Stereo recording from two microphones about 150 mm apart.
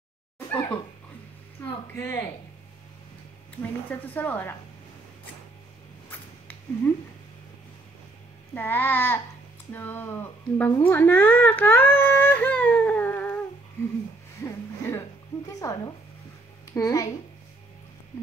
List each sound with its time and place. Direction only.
0.5 s a sound: 10° left (ahead or behind)
2.0 s speech: 15° left (ahead or behind)
3.6 s speech: 10° left (ahead or behind)
6.0 s a sound: 10° left (ahead or behind)
8.5 s speech: 15° left (ahead or behind)
14.4 s speech: 15° left (ahead or behind)